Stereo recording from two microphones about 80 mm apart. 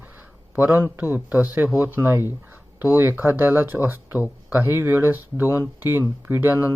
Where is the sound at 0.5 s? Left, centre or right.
Right.